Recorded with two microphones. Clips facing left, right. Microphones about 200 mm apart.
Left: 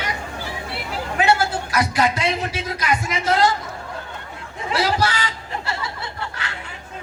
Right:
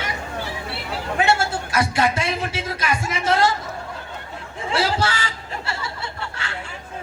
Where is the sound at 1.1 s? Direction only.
25° right (ahead or behind).